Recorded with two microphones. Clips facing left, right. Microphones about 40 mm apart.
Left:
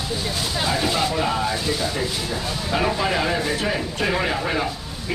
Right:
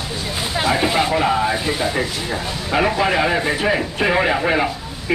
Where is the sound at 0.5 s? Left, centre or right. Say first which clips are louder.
Right 5 dB; right.